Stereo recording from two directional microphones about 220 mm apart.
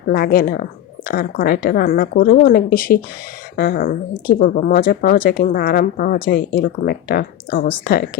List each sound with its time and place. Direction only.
0.1 s speech: 40° left (ahead or behind)